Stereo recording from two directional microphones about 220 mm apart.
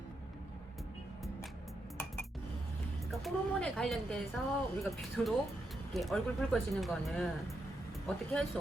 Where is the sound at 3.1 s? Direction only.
Centre (ahead or behind).